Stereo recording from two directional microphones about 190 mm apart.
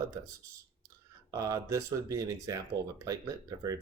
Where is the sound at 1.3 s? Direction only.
15° right (ahead or behind).